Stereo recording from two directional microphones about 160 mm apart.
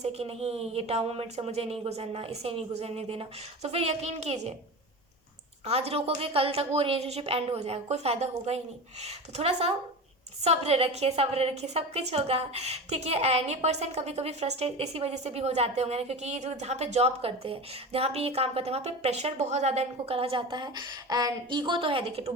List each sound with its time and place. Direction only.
0.0 s a woman's voice: 40° right (ahead or behind)
5.6 s a woman's voice: 40° right (ahead or behind)